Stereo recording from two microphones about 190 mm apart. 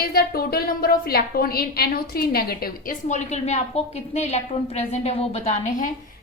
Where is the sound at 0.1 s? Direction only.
55° left (ahead or behind).